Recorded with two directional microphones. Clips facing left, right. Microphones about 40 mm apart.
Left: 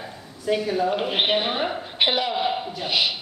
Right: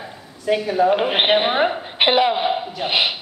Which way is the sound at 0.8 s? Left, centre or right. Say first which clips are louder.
Right 6 dB; right.